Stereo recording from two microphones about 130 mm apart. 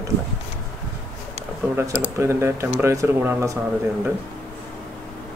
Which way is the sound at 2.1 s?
20° right (ahead or behind).